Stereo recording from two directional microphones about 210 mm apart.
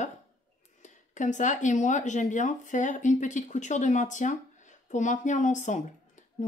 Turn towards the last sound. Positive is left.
turn(degrees=35)  # may be behind; listen again after turning